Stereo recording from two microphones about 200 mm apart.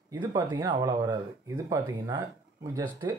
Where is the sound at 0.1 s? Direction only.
25° right (ahead or behind).